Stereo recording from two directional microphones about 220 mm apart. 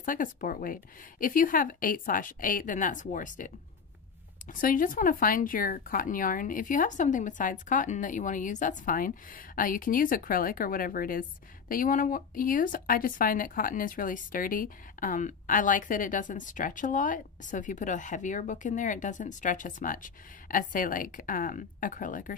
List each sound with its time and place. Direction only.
0.0 s speech: 40° left (ahead or behind)
4.6 s speech: 40° left (ahead or behind)